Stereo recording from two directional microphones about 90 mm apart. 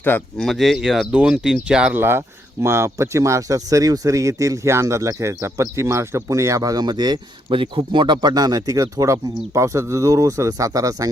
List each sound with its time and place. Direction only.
0.3 s speech: centre (ahead or behind)
2.0 s speech: 25° right (ahead or behind); by 7.2 s 50° right (ahead or behind)
7.5 s speech: 65° right (ahead or behind); by 11.1 s 40° right (ahead or behind)